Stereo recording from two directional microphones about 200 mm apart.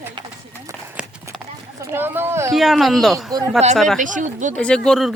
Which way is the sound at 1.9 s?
10° right (ahead or behind).